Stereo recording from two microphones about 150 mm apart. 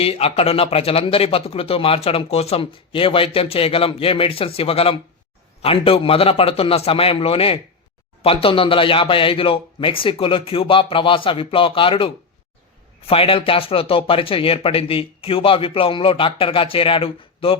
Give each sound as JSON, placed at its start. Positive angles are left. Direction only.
{"t": 0.0, "sound": "speech", "side_deg": 40}